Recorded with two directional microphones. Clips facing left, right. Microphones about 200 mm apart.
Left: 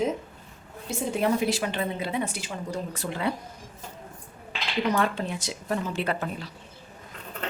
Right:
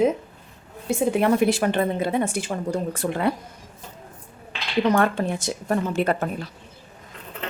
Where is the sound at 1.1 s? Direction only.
60° right (ahead or behind).